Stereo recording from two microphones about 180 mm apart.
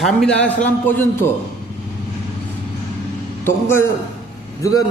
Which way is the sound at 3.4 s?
15° left (ahead or behind).